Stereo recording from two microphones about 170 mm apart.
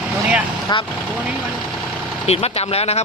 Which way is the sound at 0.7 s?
25° left (ahead or behind).